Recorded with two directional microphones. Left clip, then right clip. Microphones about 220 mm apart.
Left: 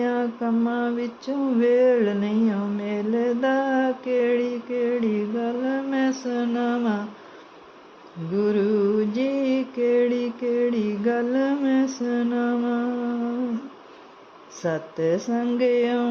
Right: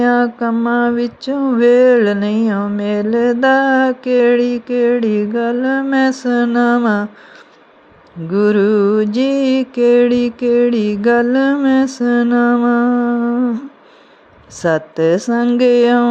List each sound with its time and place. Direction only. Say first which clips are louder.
0.0 s female singing: right 10 dB; 20° right (ahead or behind)
8.4 s female singing: right 9 dB; 25° right (ahead or behind)
14.6 s female singing: right 11 dB; 20° right (ahead or behind)